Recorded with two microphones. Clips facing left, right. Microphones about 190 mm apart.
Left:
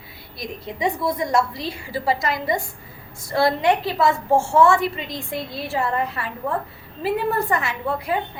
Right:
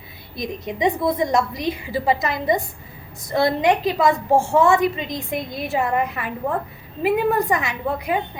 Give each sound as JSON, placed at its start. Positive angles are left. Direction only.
{"t": 0.3, "sound": "a woman's voice", "side_deg": -20}